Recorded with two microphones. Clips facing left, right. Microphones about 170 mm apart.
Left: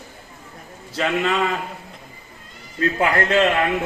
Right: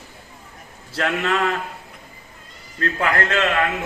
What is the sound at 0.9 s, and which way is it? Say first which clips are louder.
Speech: left 1 dB; centre (ahead or behind).